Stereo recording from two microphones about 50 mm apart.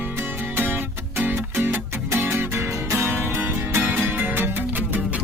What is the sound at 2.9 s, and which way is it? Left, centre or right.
Music, right.